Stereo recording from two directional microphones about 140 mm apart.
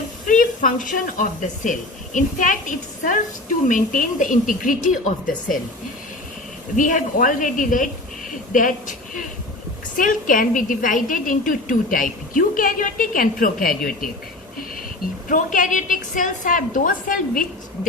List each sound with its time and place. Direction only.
0.3 s a woman's voice: 75° left (ahead or behind)
6.7 s a woman's voice: 70° left (ahead or behind); by 14.1 s 90° left
15.3 s a woman's voice: 70° left (ahead or behind)